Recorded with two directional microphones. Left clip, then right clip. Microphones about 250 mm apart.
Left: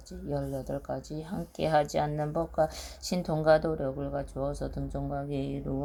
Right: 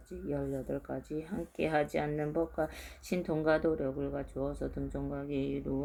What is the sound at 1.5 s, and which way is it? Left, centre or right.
Speech, left.